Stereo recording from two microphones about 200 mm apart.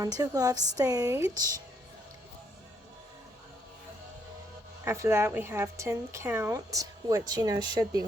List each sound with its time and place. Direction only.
0.0 s speech: 20° right (ahead or behind)
4.9 s speech: 10° right (ahead or behind)